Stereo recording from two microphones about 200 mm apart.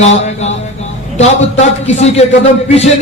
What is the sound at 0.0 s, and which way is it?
Speech, 35° left (ahead or behind).